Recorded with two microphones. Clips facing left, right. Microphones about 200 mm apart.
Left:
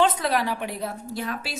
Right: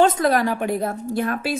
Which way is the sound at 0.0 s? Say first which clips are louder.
Right 5 dB; 45° right (ahead or behind).